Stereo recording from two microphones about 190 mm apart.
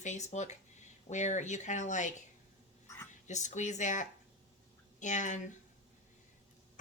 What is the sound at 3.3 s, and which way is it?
Speech, 40° left (ahead or behind).